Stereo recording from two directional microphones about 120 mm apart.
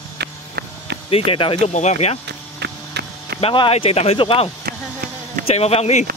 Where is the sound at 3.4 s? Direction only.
50° left (ahead or behind).